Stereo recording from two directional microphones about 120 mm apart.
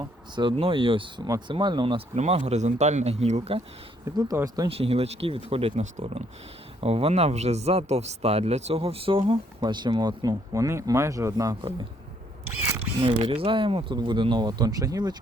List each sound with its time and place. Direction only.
0.5 s speech: 50° right (ahead or behind)
2.1 s a man's voice: 60° right (ahead or behind)
4.0 s speech: 30° right (ahead or behind)
4.7 s a man's voice: 55° right (ahead or behind)
9.6 s speech: 40° right (ahead or behind)
13.0 s speech: 50° right (ahead or behind); by 15.1 s 35° right (ahead or behind)